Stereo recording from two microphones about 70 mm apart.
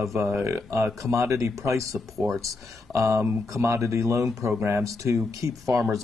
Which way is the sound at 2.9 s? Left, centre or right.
Right.